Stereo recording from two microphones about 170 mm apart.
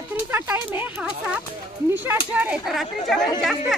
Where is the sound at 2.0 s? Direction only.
10° right (ahead or behind).